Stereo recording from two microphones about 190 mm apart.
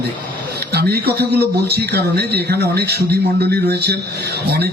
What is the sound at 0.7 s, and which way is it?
A man's voice, 55° right (ahead or behind).